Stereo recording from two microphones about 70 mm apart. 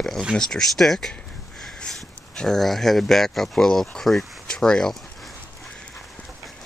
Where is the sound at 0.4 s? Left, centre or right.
Centre.